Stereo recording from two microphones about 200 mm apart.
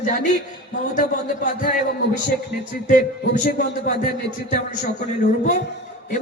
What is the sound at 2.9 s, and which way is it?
Speech, 40° left (ahead or behind).